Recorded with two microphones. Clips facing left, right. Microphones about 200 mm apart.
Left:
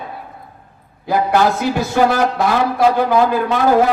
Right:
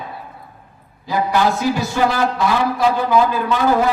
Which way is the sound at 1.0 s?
55° left (ahead or behind).